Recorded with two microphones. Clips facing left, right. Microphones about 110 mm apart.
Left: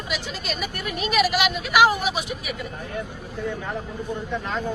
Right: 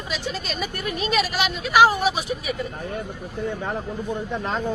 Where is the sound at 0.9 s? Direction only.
35° right (ahead or behind).